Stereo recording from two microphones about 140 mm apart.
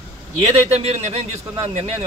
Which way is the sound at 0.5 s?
50° right (ahead or behind).